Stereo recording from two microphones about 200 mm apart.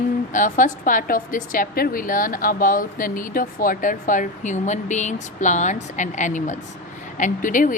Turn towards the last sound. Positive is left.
turn(degrees=40)  # may be behind; listen again after turning